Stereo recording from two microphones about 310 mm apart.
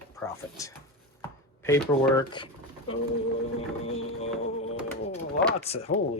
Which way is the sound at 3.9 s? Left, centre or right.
Centre.